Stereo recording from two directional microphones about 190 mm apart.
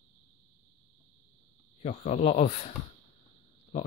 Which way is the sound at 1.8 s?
35° left (ahead or behind).